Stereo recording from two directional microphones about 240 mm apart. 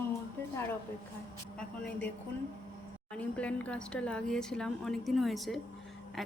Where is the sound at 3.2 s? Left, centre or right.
Centre.